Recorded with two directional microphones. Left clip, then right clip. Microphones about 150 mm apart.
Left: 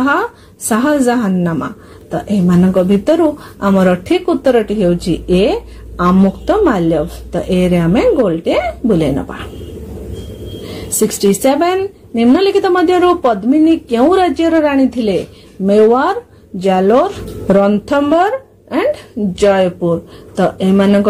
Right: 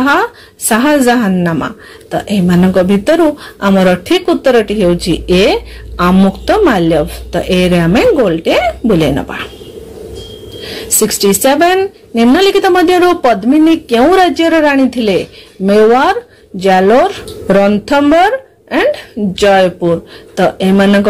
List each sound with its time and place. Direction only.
0.0 s a woman's voice: 10° right (ahead or behind)
10.7 s a woman's voice: 10° right (ahead or behind)